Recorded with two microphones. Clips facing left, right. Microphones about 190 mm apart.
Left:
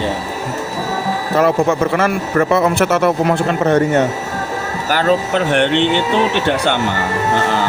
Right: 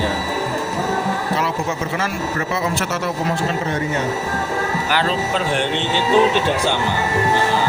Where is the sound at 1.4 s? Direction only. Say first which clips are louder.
Left 9 dB; 55° left (ahead or behind).